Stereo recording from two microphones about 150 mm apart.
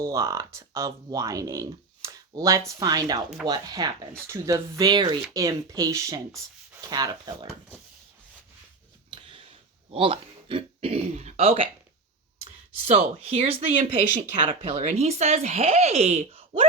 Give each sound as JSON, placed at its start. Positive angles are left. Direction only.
{"t": 0.0, "sound": "speech", "side_deg": -20}
{"t": 9.1, "sound": "a sound", "side_deg": -35}
{"t": 9.9, "sound": "speech", "side_deg": -35}